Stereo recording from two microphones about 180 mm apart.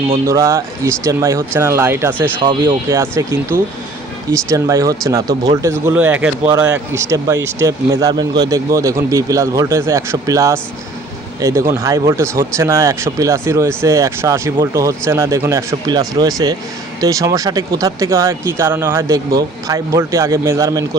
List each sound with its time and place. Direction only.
0.3 s speech: 15° right (ahead or behind)
2.4 s speech: 25° right (ahead or behind)